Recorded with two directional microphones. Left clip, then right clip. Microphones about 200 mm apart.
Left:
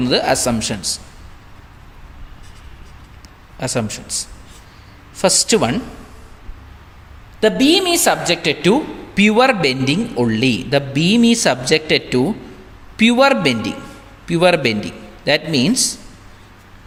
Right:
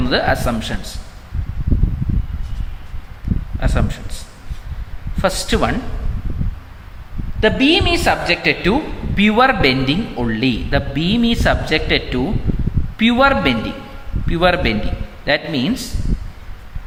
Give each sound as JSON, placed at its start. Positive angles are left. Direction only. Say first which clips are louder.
{"t": 0.1, "sound": "speech", "louder": "left 1 dB", "side_deg": 40}
{"t": 3.6, "sound": "speech", "louder": "left 2 dB", "side_deg": 40}
{"t": 7.3, "sound": "a woman's voice", "louder": "even", "side_deg": 45}